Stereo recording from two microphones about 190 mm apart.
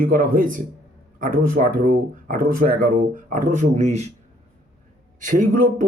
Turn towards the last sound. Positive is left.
turn(degrees=-45)  # may be behind; listen again after turning